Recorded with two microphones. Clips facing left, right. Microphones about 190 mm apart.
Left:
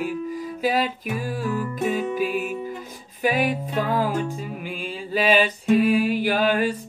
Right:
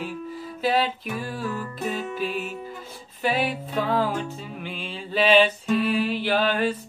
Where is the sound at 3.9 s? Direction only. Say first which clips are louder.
Left 1 dB; 10° left (ahead or behind).